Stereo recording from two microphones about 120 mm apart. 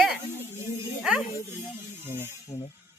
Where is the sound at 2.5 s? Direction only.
85° left.